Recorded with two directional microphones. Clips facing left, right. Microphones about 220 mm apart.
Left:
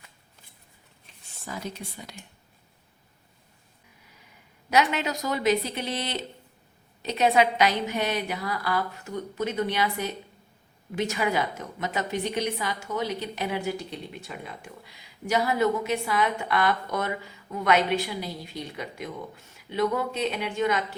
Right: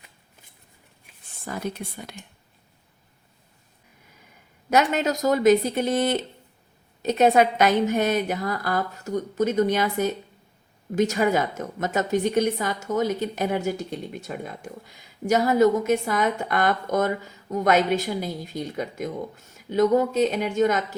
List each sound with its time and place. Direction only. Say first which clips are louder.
1.1 s a sound: even; 10° right (ahead or behind)
1.5 s speech: right 5 dB; 55° right (ahead or behind)
4.7 s a woman's voice: right 3 dB; 45° right (ahead or behind)